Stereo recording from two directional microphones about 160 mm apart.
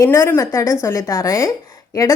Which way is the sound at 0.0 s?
15° left (ahead or behind).